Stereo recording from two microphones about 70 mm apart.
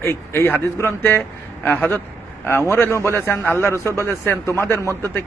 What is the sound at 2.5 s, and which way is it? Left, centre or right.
A man's voice, left.